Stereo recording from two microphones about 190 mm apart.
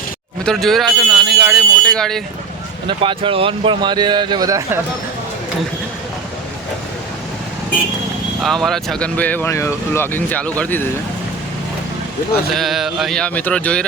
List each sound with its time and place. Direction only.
0.4 s speech: centre (ahead or behind)
2.8 s speech: 25° right (ahead or behind)
8.4 s speech: centre (ahead or behind)
12.5 s speech: centre (ahead or behind)